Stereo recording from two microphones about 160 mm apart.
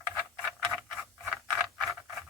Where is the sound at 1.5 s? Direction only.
Centre (ahead or behind).